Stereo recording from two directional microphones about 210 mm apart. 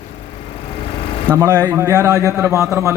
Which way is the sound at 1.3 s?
15° right (ahead or behind).